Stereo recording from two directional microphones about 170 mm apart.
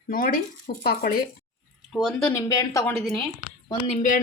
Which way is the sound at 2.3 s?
20° left (ahead or behind).